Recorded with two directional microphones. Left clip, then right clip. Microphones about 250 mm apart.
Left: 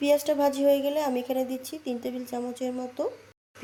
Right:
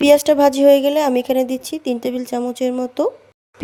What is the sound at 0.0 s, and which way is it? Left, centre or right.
Speech, right.